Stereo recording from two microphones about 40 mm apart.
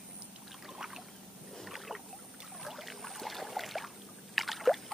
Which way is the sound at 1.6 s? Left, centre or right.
Centre.